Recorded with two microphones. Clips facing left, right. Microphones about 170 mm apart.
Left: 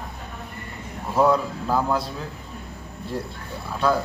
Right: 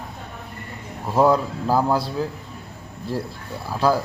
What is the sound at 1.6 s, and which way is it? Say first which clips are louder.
Mantra: right 3 dB; 30° right (ahead or behind).